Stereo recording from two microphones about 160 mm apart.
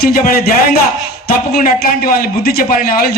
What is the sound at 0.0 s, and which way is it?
Speech, 65° left (ahead or behind).